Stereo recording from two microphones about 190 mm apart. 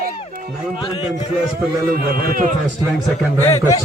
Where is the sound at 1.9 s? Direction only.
50° right (ahead or behind).